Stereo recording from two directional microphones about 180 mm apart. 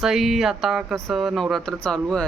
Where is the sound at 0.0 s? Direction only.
Centre (ahead or behind).